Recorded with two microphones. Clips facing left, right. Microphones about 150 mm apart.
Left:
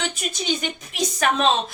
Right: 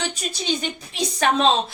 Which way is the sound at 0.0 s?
35° right (ahead or behind).